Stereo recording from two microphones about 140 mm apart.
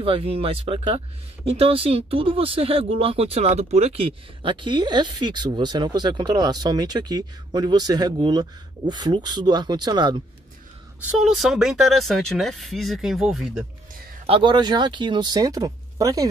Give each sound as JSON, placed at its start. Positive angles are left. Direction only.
{"t": 0.0, "sound": "speech", "side_deg": -45}
{"t": 11.1, "sound": "speech", "side_deg": 0}
{"t": 14.2, "sound": "speech", "side_deg": -35}